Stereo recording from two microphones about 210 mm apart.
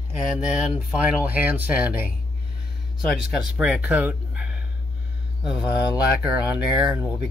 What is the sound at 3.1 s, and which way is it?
Speech, 5° right (ahead or behind).